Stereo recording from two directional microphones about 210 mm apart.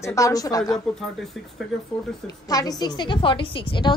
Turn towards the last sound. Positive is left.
turn(degrees=25)  # may be behind; listen again after turning